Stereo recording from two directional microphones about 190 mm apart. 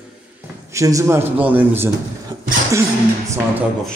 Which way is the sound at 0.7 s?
15° right (ahead or behind).